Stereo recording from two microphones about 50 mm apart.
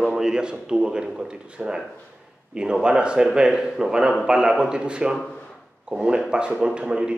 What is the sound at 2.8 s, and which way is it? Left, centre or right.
A man's voice, centre.